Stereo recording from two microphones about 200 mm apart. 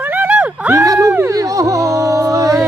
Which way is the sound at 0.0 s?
10° right (ahead or behind).